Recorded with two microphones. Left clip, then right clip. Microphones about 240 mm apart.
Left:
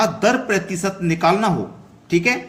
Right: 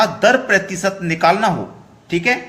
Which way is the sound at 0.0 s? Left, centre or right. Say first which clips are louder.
Right 4 dB; centre.